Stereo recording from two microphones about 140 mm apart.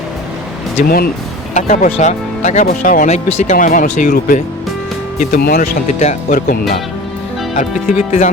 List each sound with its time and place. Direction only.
0.8 s speech: 90° left
1.5 s speech: 60° left (ahead or behind); by 3.1 s 75° left (ahead or behind)
3.1 s speech: 60° left (ahead or behind); by 4.4 s 75° left (ahead or behind)
5.3 s speech: 90° left
6.0 s speech: 55° left (ahead or behind)
7.5 s speech: 55° left (ahead or behind)